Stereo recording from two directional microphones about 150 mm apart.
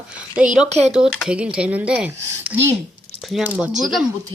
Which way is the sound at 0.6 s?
50° right (ahead or behind).